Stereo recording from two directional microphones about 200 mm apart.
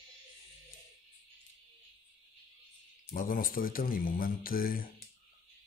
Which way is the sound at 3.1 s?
45° left (ahead or behind).